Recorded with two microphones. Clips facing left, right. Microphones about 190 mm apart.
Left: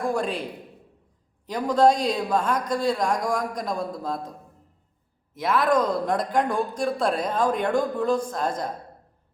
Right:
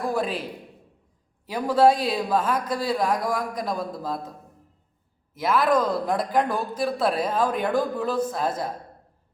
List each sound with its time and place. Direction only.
0.0 s speech: 5° right (ahead or behind)
1.5 s speech: 5° right (ahead or behind)
5.3 s speech: centre (ahead or behind)